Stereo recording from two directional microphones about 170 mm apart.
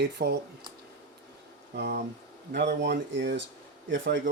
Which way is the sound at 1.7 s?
80° right.